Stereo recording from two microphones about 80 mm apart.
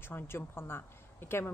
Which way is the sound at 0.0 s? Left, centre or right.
Left.